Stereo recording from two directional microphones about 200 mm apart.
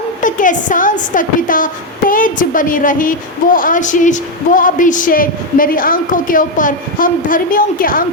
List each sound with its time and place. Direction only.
0.2 s a woman's voice: 40° left (ahead or behind)